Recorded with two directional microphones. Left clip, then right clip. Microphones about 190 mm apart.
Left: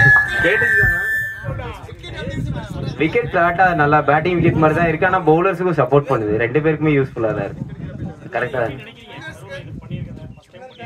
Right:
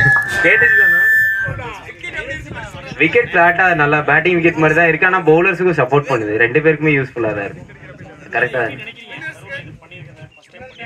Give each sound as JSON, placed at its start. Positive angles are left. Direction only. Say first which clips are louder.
{"t": 0.1, "sound": "speech", "louder": "right 1 dB", "side_deg": 50}
{"t": 3.0, "sound": "a man's voice", "louder": "right 5 dB", "side_deg": 70}